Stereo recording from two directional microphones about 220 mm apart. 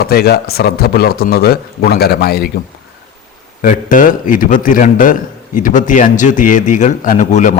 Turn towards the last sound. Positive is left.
turn(degrees=35)  # may be behind; listen again after turning